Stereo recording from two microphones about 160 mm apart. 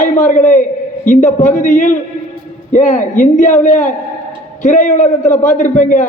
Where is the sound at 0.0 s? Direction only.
50° left (ahead or behind).